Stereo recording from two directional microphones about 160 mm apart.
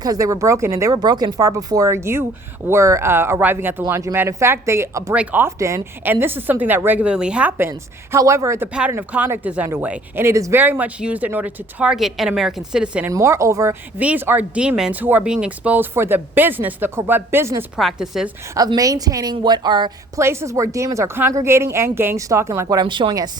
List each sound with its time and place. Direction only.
0.0 s a woman's voice: 20° right (ahead or behind)
7.7 s a woman's voice: 20° right (ahead or behind)
13.1 s speech: 20° right (ahead or behind)
17.7 s speech: centre (ahead or behind)
18.5 s a woman's voice: 20° right (ahead or behind)